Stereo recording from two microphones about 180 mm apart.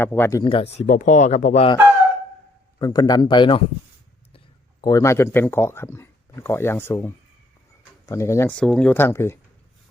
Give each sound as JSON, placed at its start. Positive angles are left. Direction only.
{"t": 0.0, "sound": "speech", "side_deg": 10}
{"t": 0.4, "sound": "speech", "side_deg": 30}
{"t": 2.7, "sound": "a man's voice", "side_deg": 25}
{"t": 4.8, "sound": "speech", "side_deg": 20}